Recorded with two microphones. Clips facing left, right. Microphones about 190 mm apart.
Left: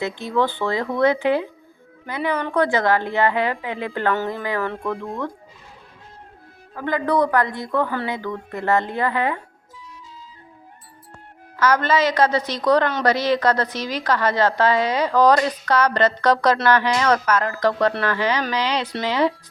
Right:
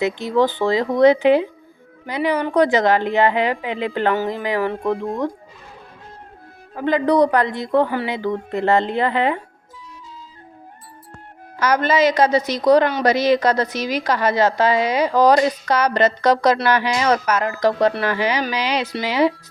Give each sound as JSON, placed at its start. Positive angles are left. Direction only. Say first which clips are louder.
{"t": 0.0, "sound": "a woman's voice", "louder": "right 4 dB", "side_deg": -15}
{"t": 6.7, "sound": "a woman's voice", "louder": "right 4 dB", "side_deg": -20}
{"t": 11.5, "sound": "a woman's voice", "louder": "right 1 dB", "side_deg": -15}